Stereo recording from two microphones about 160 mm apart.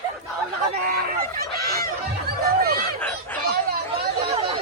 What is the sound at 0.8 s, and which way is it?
Fowl, 65° right (ahead or behind).